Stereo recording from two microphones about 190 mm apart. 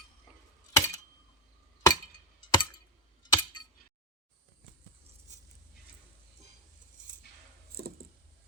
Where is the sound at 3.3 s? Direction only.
20° left (ahead or behind).